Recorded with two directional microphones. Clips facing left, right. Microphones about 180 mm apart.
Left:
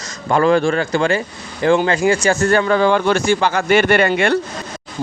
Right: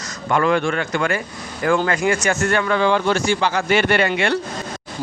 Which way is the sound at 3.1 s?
55° left (ahead or behind).